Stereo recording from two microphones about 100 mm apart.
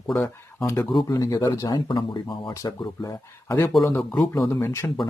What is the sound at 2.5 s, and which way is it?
Speech, 35° left (ahead or behind).